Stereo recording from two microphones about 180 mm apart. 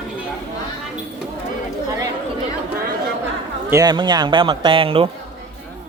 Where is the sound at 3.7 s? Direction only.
20° right (ahead or behind).